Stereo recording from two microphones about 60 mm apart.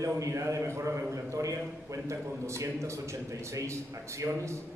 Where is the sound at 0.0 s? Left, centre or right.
Right.